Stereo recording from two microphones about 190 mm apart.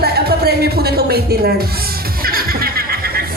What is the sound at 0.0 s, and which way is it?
Music, 55° right (ahead or behind).